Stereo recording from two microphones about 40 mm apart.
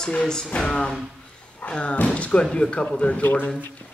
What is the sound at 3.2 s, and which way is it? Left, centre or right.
Speech, left.